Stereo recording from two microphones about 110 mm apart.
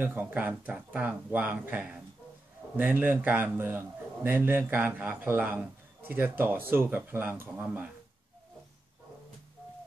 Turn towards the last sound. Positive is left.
turn(degrees=-15)  # may be behind; listen again after turning